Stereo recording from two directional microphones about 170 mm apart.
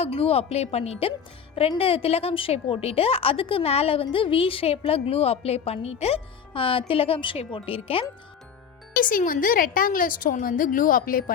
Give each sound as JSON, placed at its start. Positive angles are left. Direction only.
{"t": 0.0, "sound": "a woman's voice", "side_deg": 35}
{"t": 9.0, "sound": "a woman's voice", "side_deg": 55}